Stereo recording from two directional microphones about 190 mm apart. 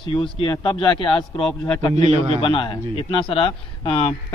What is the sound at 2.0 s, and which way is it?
Speech, 35° right (ahead or behind).